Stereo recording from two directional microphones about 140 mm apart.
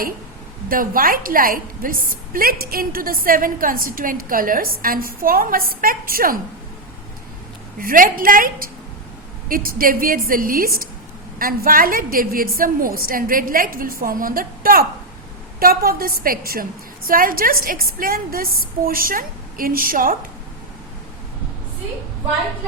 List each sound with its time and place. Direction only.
0.7 s a woman's voice: 90° right
7.8 s a woman's voice: 85° right